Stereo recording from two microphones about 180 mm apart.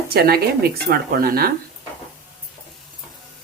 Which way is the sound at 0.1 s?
60° right (ahead or behind).